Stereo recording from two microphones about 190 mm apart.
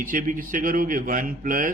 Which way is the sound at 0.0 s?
45° right (ahead or behind).